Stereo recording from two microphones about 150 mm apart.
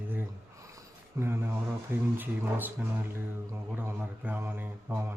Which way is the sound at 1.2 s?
15° right (ahead or behind).